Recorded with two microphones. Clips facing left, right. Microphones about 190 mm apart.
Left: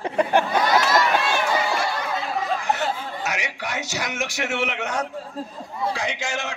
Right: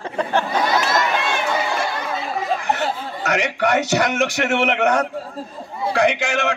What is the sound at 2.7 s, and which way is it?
A man's voice, 60° right (ahead or behind).